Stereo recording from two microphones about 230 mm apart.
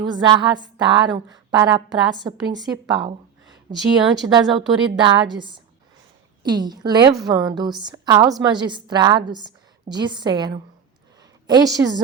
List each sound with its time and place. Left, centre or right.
0.0 s a woman's voice: centre